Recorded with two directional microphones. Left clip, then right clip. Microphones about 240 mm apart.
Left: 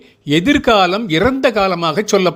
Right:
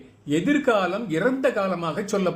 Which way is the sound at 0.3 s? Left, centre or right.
Left.